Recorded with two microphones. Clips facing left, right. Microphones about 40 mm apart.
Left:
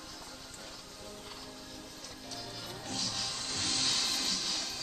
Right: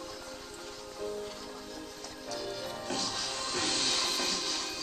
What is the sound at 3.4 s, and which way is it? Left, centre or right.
Music, right.